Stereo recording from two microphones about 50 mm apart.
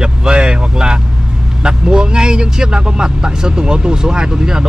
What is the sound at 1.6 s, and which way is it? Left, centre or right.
Speech, centre.